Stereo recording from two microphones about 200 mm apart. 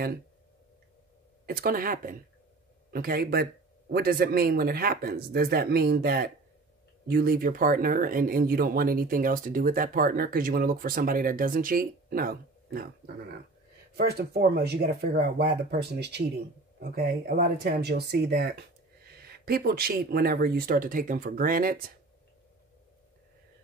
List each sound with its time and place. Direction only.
1.4 s speech: 45° right (ahead or behind)
17.6 s speech: 55° right (ahead or behind)